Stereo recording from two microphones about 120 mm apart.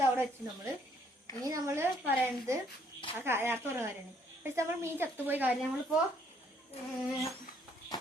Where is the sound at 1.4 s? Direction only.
25° right (ahead or behind).